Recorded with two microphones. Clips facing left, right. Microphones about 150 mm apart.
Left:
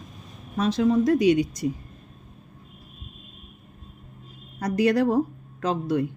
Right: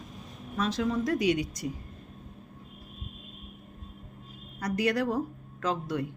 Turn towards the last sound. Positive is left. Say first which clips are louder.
# left 6 dB
turn(degrees=25)  # may be behind; listen again after turning